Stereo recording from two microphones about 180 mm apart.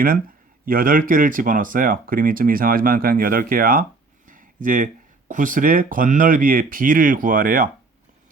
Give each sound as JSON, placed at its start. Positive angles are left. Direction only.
{"t": 0.6, "sound": "speech", "side_deg": -50}
{"t": 4.3, "sound": "a sound", "side_deg": -50}
{"t": 5.3, "sound": "speech", "side_deg": -45}